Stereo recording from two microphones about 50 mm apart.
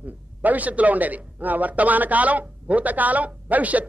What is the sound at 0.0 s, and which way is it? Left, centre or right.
A man's voice, right.